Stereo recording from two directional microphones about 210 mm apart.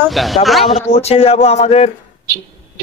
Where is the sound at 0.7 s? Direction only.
30° left (ahead or behind).